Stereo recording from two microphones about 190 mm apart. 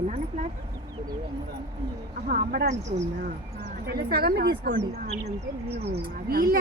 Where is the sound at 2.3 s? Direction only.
50° right (ahead or behind).